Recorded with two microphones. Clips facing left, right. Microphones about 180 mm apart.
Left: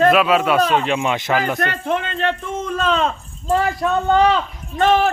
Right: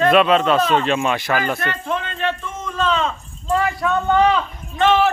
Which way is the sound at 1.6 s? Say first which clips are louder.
Left 3 dB; 60° left (ahead or behind).